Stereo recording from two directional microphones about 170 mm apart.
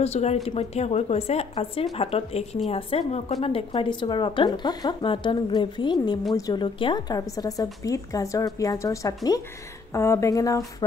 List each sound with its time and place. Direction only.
0.0 s a woman's voice: 40° left (ahead or behind); by 10.6 s 20° left (ahead or behind)